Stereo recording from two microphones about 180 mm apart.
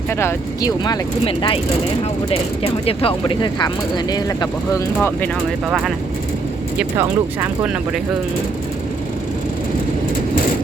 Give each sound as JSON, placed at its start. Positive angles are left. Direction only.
{"t": 0.1, "sound": "speech", "side_deg": 15}
{"t": 1.2, "sound": "speech", "side_deg": 30}
{"t": 2.8, "sound": "speech", "side_deg": 30}
{"t": 5.6, "sound": "speech", "side_deg": 0}
{"t": 6.7, "sound": "speech", "side_deg": -15}